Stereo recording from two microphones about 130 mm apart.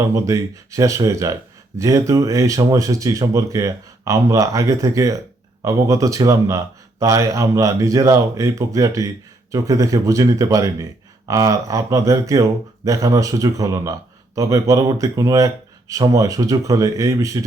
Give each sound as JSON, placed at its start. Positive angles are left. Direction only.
{"t": 0.0, "sound": "speech", "side_deg": -25}